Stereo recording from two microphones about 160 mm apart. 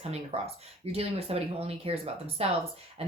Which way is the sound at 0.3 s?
40° right (ahead or behind).